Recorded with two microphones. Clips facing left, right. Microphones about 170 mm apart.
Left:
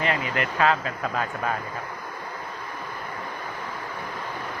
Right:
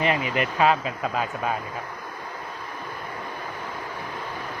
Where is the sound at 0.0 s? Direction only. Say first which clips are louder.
Right 2 dB; 20° right (ahead or behind).